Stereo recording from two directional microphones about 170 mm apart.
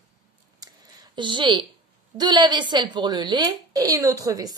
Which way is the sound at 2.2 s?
25° right (ahead or behind).